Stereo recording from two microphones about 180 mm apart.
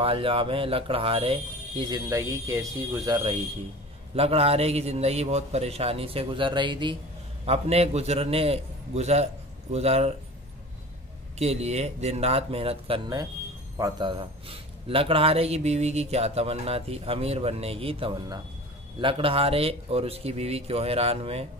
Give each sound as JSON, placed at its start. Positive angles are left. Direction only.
{"t": 0.0, "sound": "a man's voice", "side_deg": -30}
{"t": 2.0, "sound": "speech", "side_deg": -15}
{"t": 4.1, "sound": "a man's voice", "side_deg": -35}
{"t": 11.3, "sound": "a man's voice", "side_deg": -35}